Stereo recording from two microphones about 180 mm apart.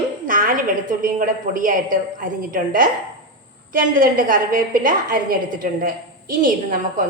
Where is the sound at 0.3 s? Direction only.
50° right (ahead or behind).